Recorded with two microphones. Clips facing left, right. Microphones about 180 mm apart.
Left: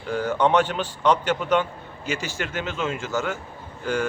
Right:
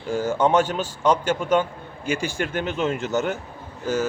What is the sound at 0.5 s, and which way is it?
A man's voice, 45° right (ahead or behind).